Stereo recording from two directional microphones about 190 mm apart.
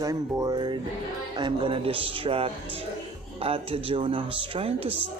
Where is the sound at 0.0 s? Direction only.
20° right (ahead or behind).